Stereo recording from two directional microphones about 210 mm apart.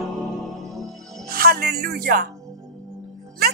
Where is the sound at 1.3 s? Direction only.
45° right (ahead or behind).